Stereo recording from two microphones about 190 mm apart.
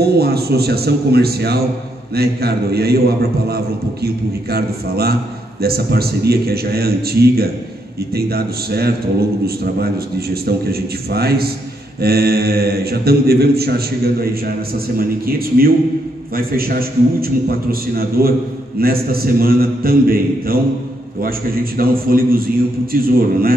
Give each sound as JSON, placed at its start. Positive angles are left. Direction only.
{"t": 0.0, "sound": "a man's voice", "side_deg": -55}